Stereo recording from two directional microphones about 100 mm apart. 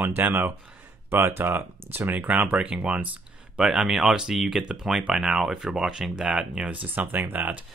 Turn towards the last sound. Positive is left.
turn(degrees=-20)  # may be behind; listen again after turning